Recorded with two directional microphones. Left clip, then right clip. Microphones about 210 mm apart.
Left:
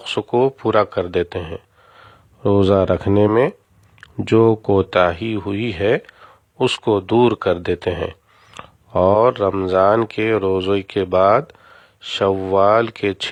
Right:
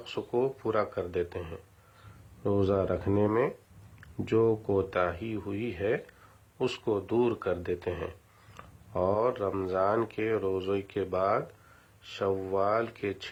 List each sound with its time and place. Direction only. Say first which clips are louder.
0.0 s speech: left 13 dB; 40° left (ahead or behind)